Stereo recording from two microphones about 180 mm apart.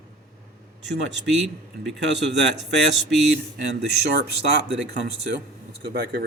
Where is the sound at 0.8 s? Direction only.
80° right.